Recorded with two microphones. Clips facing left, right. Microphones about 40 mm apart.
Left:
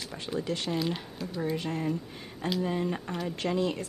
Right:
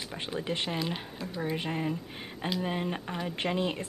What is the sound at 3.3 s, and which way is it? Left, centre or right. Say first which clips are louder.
Speech: left 1 dB; right.